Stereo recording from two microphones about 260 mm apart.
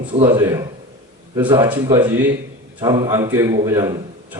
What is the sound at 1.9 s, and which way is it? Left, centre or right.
A man's voice, centre.